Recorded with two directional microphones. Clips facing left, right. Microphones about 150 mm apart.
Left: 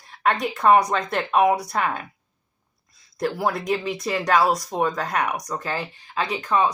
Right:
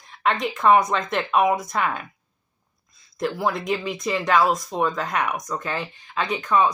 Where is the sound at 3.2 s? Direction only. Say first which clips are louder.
Even; 40° left (ahead or behind).